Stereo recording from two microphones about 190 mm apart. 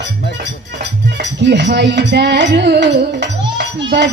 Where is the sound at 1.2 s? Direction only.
65° right (ahead or behind).